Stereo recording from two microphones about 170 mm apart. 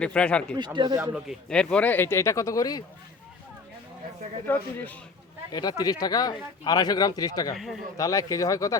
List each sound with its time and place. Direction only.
0.0 s speech: 5° left (ahead or behind)
0.5 s speech: 25° right (ahead or behind)
1.1 s speech: centre (ahead or behind); by 2.8 s 20° left (ahead or behind)
4.4 s speech: 10° left (ahead or behind)
5.5 s speech: 25° left (ahead or behind)
7.5 s speech: centre (ahead or behind)
7.9 s speech: 20° left (ahead or behind)